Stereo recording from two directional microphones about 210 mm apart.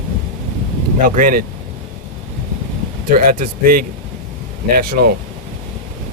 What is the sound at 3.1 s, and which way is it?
Speech, 40° right (ahead or behind).